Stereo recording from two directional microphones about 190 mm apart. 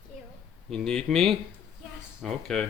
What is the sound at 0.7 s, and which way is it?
Speech, centre (ahead or behind).